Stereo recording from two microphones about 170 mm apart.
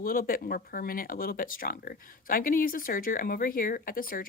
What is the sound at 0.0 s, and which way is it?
Speech, 55° left (ahead or behind).